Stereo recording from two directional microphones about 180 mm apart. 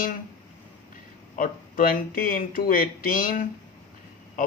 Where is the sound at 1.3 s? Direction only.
50° left (ahead or behind).